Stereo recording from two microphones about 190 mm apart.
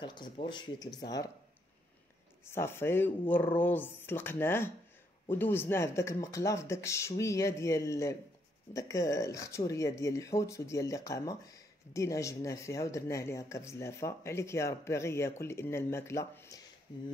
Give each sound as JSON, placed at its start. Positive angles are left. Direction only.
{"t": 0.0, "sound": "speech", "side_deg": 25}
{"t": 2.4, "sound": "speech", "side_deg": 15}